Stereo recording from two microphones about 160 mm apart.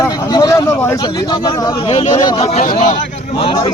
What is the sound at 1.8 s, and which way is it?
Speech, 40° left (ahead or behind).